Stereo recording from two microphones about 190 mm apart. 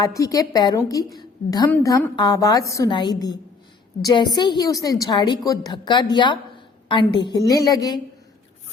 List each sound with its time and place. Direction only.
0.0 s a woman's voice: 15° left (ahead or behind)